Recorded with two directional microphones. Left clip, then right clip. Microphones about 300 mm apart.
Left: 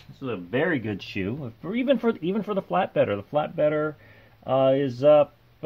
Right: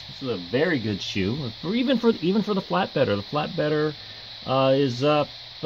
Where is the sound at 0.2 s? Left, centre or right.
Centre.